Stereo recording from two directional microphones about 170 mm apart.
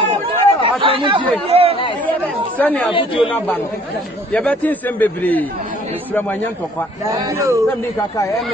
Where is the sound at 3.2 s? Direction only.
5° left (ahead or behind).